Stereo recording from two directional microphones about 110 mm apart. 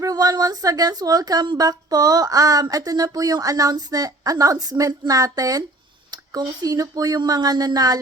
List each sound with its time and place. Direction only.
0.0 s speech: 35° right (ahead or behind)